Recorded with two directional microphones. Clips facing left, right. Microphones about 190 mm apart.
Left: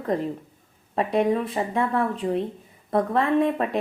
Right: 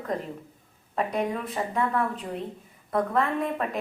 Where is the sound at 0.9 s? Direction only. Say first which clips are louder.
Left 6 dB; 30° left (ahead or behind).